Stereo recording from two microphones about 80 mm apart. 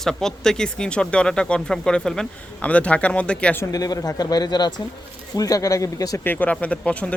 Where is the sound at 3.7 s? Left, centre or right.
Left.